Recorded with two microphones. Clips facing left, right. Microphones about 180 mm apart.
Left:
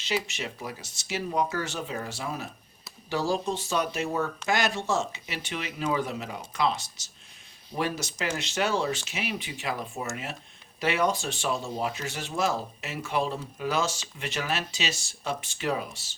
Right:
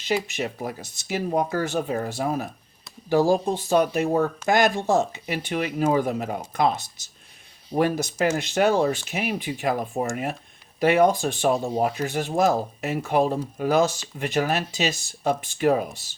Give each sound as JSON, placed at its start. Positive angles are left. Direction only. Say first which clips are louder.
{"t": 0.0, "sound": "speech", "louder": "right 5 dB", "side_deg": -50}